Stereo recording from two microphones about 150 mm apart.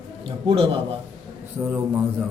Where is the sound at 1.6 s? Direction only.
15° right (ahead or behind).